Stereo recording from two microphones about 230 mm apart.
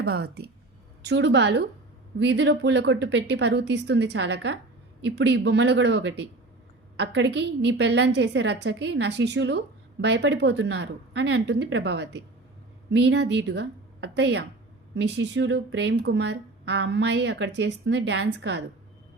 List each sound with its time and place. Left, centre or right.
0.0 s a woman's voice: right